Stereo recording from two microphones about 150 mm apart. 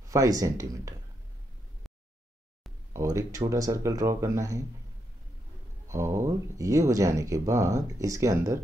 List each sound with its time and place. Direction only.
0.0 s speech: 25° right (ahead or behind)
2.9 s speech: 20° right (ahead or behind)
5.9 s speech: 20° right (ahead or behind)